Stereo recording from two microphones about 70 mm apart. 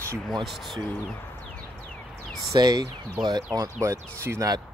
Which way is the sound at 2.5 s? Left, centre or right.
Right.